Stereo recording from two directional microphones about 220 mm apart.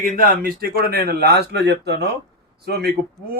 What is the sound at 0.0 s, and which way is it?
A man's voice, 40° right (ahead or behind).